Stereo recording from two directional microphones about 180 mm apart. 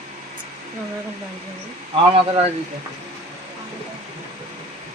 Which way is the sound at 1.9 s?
30° right (ahead or behind).